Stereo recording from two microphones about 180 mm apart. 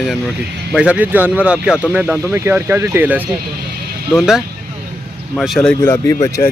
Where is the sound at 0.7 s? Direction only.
10° right (ahead or behind).